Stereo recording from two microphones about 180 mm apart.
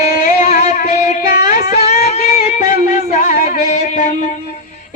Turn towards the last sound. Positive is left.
turn(degrees=45)  # may be behind; listen again after turning